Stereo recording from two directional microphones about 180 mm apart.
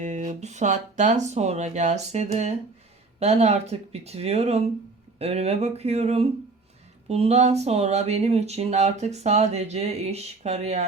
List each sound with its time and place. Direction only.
0.0 s speech: 45° right (ahead or behind)